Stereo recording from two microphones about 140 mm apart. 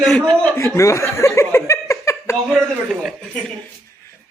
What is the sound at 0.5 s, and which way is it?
Chuckle, 20° left (ahead or behind).